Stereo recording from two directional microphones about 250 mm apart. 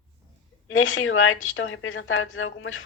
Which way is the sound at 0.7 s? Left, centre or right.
Left.